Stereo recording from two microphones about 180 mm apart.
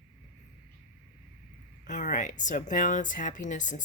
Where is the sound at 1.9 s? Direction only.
45° left (ahead or behind).